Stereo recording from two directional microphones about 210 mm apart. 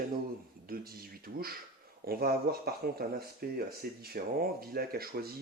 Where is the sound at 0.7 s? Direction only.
45° right (ahead or behind).